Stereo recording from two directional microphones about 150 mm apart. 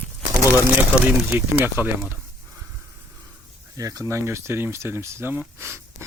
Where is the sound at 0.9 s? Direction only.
5° right (ahead or behind).